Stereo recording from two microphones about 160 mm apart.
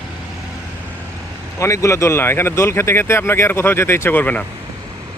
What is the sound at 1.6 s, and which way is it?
Speech, 20° left (ahead or behind).